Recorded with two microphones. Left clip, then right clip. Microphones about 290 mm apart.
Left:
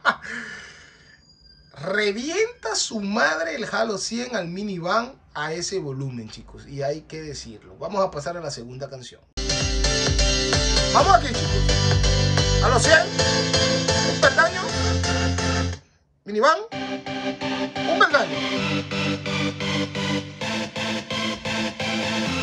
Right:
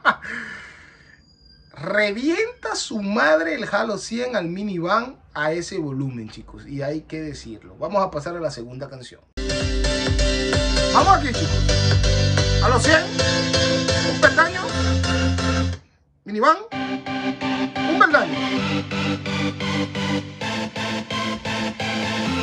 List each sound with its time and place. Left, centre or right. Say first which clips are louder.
0.0 s a sound: right 3 dB; centre
1.8 s speech: right 3 dB; centre
9.4 s music: even; centre